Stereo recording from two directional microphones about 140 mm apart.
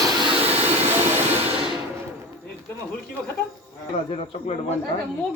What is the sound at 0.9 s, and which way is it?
Vehicle, 15° right (ahead or behind).